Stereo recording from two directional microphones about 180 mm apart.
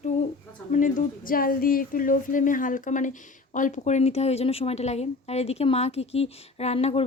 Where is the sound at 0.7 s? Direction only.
45° left (ahead or behind).